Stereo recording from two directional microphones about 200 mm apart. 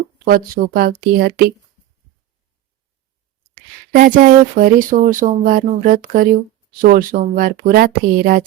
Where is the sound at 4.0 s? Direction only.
40° right (ahead or behind).